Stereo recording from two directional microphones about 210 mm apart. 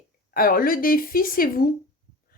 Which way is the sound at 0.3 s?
40° left (ahead or behind).